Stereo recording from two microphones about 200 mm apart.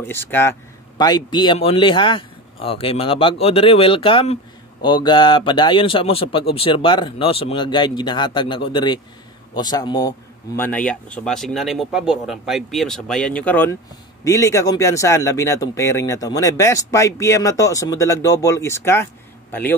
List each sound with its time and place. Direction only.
0.0 s speech: 10° left (ahead or behind)